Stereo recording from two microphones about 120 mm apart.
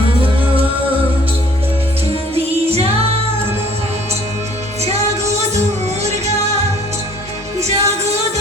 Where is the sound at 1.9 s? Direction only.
55° right (ahead or behind).